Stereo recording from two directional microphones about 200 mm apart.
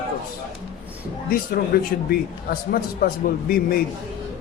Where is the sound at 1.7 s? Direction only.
45° left (ahead or behind).